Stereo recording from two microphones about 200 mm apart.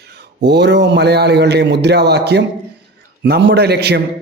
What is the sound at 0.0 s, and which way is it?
A man's voice, 55° right (ahead or behind).